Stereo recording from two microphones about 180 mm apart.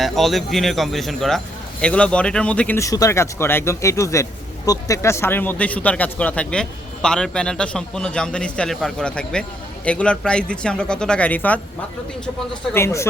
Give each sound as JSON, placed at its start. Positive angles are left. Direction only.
{"t": 0.0, "sound": "speech", "side_deg": 0}
{"t": 12.7, "sound": "speech", "side_deg": 15}